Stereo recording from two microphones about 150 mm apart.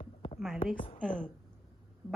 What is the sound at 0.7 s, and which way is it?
Speech, 35° left (ahead or behind).